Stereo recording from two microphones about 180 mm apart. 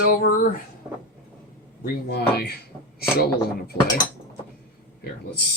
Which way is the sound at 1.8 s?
60° left (ahead or behind).